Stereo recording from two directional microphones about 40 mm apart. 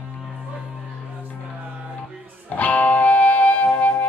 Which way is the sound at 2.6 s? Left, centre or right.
Left.